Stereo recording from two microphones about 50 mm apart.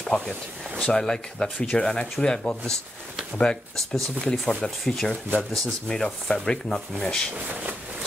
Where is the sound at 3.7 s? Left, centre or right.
Centre.